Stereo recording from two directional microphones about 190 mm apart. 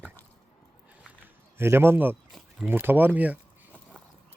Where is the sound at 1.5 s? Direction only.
10° right (ahead or behind).